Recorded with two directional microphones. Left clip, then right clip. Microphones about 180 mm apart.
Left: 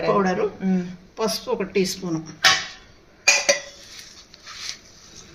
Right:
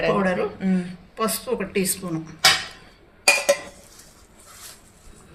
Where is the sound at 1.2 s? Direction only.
40° left (ahead or behind).